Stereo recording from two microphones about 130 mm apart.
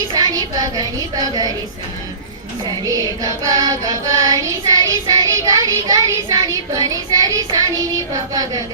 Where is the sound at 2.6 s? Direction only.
30° right (ahead or behind).